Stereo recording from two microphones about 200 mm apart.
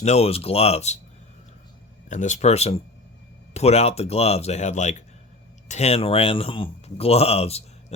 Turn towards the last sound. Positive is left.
turn(degrees=30)  # may be behind; listen again after turning